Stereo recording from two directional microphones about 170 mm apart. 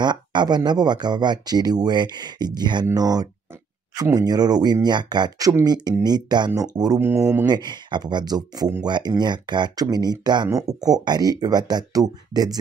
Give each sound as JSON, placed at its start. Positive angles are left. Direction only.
{"t": 0.0, "sound": "speech", "side_deg": -25}